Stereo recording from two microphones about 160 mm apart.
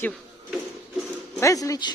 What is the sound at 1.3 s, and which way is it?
Speech, 20° left (ahead or behind).